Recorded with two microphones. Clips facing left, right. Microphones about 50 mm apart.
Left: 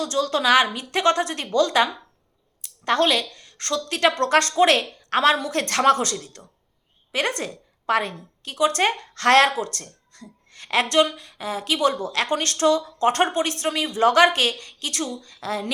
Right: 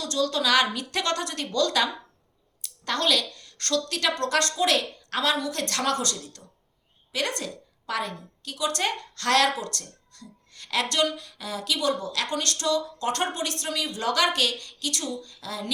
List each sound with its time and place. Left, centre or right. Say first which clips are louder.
0.0 s a woman's voice: left 4 dB; left
3.9 s a woman's voice: left 9 dB; left
9.6 s a woman's voice: left 5 dB; left
10.1 s a sound: left 3 dB; left
10.9 s a woman's voice: left 6 dB; left